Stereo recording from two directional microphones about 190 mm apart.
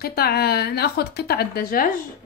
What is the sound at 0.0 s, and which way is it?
A woman's voice, 55° left (ahead or behind).